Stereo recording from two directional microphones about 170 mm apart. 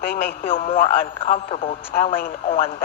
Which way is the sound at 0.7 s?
35° left (ahead or behind).